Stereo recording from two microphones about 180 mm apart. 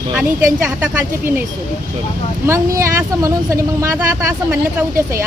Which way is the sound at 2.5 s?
15° right (ahead or behind).